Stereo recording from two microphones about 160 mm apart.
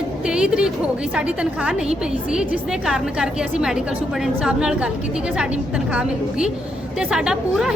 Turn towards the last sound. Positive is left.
turn(degrees=-5)  # may be behind; listen again after turning